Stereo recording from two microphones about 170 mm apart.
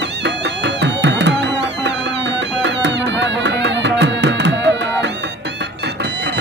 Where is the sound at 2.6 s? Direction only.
90° right.